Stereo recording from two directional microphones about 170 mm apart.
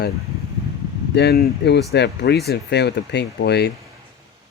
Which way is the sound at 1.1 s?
70° left (ahead or behind).